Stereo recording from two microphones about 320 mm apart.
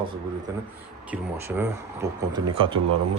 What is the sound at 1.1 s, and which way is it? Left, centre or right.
Speech, centre.